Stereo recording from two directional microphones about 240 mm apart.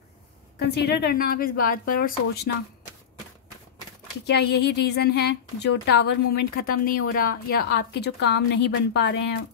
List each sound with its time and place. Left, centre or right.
0.6 s a woman's voice: left
4.3 s a woman's voice: left